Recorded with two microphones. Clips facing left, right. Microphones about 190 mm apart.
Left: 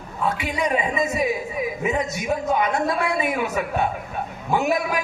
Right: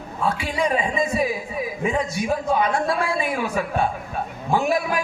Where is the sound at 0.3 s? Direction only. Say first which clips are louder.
Right 1 dB; 30° right (ahead or behind).